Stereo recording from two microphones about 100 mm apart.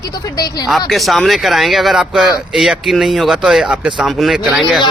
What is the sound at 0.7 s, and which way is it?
Speech, centre (ahead or behind).